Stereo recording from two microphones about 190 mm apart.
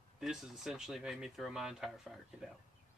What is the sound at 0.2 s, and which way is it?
Speech, centre (ahead or behind).